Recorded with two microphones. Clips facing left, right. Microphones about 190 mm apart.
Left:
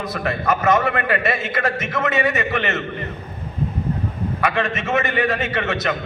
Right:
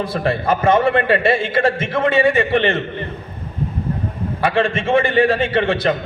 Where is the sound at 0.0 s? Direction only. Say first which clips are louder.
Right 4 dB; 30° right (ahead or behind).